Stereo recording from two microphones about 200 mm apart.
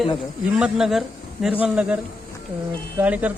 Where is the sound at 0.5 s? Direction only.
5° right (ahead or behind).